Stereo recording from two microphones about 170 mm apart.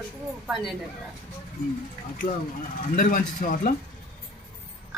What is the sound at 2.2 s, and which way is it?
Speech, 55° left (ahead or behind).